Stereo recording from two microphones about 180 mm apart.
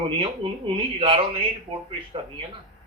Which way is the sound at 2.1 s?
30° right (ahead or behind).